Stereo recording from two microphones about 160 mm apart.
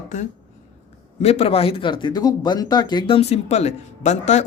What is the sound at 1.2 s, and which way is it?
Speech, 40° left (ahead or behind).